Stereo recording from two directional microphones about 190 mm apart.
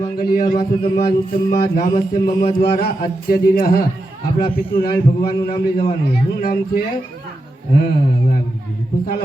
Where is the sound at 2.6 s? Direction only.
55° left (ahead or behind).